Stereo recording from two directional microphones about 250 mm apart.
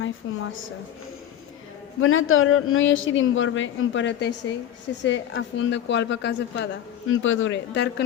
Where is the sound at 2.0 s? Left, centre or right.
Left.